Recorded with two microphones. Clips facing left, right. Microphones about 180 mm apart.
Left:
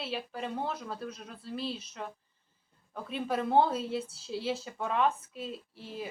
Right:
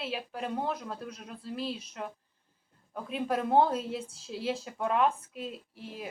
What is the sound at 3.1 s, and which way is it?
Speech, centre (ahead or behind).